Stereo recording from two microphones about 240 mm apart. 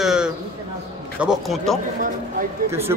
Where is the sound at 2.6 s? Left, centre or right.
Centre.